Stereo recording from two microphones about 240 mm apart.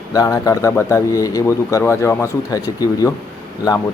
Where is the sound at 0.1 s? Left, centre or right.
Centre.